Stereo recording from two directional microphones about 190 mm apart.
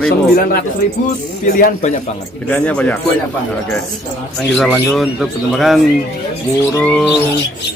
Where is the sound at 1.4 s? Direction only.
45° left (ahead or behind).